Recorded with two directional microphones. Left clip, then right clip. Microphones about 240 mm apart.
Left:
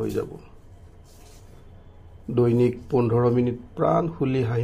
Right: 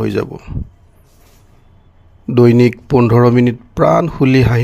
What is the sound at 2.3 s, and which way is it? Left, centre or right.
Speech, right.